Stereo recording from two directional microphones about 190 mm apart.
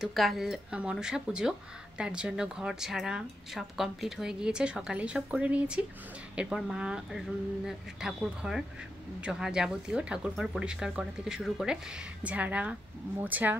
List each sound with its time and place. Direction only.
0.0 s a woman's voice: centre (ahead or behind)